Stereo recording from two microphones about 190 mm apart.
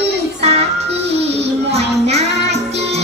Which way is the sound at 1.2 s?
30° right (ahead or behind).